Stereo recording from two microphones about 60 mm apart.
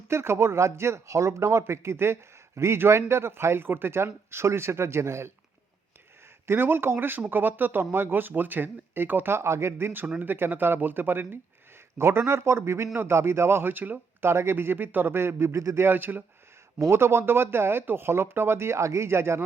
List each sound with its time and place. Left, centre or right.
0.1 s speech: right
6.5 s speech: right
14.3 s speech: right
15.9 s speech: right